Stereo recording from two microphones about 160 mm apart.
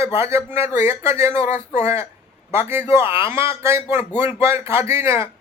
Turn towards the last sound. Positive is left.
turn(degrees=-15)  # may be behind; listen again after turning